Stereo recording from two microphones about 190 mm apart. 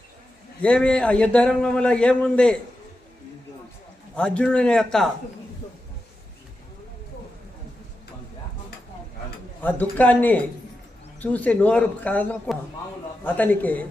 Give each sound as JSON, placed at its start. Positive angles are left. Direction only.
{"t": 0.6, "sound": "a man's voice", "side_deg": 5}
{"t": 4.1, "sound": "a man's voice", "side_deg": 5}
{"t": 10.0, "sound": "speech", "side_deg": 10}